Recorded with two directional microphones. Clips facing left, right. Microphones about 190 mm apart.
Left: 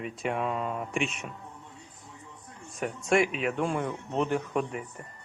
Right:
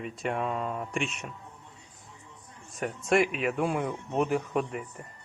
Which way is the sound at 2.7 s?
Centre (ahead or behind).